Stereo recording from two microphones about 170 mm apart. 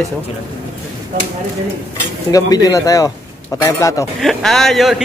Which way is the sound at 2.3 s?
20° left (ahead or behind).